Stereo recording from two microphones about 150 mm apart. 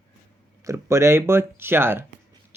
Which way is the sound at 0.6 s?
20° right (ahead or behind).